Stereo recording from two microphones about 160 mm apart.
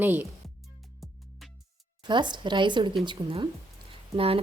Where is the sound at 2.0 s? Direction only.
30° right (ahead or behind).